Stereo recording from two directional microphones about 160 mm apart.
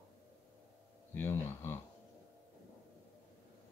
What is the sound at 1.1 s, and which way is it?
Speech, 15° left (ahead or behind).